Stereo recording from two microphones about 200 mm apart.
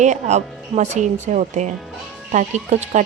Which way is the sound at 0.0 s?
35° right (ahead or behind).